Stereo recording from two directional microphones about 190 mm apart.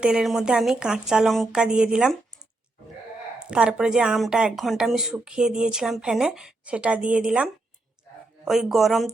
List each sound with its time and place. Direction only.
0.0 s speech: 5° right (ahead or behind)
3.4 s speech: 5° right (ahead or behind)